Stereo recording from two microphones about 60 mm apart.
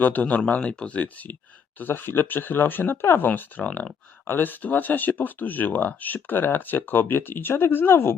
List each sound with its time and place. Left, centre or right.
0.0 s speech: left
3.2 s speech: left